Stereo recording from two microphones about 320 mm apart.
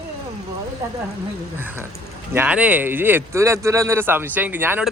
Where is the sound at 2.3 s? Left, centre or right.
Centre.